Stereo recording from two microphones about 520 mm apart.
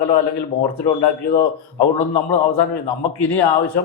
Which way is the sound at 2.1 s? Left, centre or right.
Left.